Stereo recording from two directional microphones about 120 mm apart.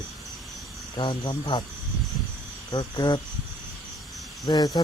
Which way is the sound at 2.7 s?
40° left (ahead or behind).